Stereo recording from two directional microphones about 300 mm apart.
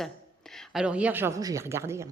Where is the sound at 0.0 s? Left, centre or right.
Centre.